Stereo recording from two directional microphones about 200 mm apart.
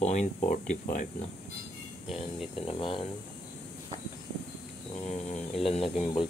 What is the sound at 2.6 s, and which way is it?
Speech, 25° left (ahead or behind).